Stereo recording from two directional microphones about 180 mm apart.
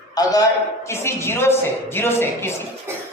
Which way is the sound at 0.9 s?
15° left (ahead or behind).